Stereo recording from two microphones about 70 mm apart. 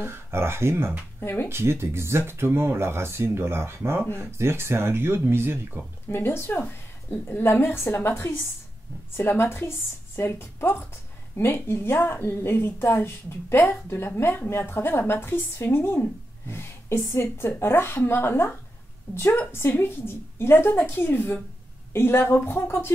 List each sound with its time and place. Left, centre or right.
0.0 s speech: right
1.2 s speech: left
1.5 s speech: right
6.0 s a woman's voice: left